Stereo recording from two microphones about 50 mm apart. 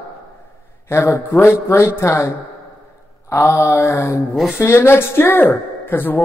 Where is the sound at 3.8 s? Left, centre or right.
Left.